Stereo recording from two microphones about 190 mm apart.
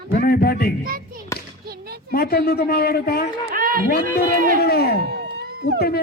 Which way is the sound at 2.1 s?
55° left (ahead or behind).